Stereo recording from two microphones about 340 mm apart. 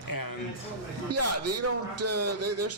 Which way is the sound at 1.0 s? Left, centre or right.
Right.